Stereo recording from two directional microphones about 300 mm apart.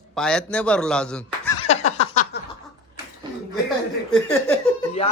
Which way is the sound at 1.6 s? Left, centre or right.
Left.